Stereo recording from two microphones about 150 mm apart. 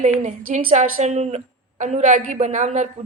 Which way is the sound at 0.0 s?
50° right (ahead or behind).